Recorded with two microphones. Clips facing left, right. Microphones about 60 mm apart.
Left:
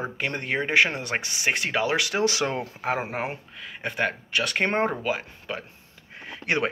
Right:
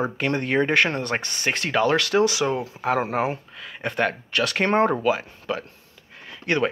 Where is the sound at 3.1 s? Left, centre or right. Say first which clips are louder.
Right 6 dB; centre.